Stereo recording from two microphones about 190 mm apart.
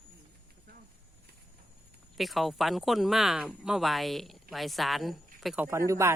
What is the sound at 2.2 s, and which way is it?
Speech, centre (ahead or behind).